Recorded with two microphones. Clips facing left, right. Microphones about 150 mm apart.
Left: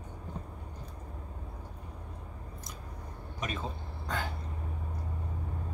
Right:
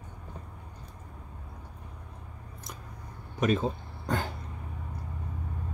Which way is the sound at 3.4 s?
45° right (ahead or behind).